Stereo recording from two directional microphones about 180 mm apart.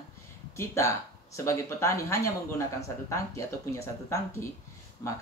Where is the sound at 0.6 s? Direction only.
15° left (ahead or behind).